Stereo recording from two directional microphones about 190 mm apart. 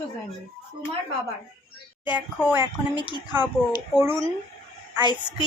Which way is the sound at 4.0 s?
10° right (ahead or behind).